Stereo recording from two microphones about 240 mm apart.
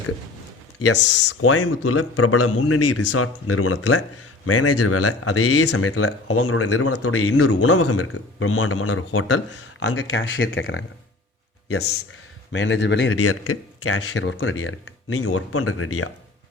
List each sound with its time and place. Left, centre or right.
0.8 s speech: left
12.5 s speech: left
13.1 s speech: left